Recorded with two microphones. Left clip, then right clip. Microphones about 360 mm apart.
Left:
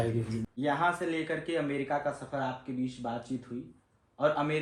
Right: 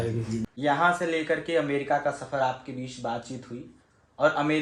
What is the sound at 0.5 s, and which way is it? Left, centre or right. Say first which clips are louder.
Speech: right 6 dB; right.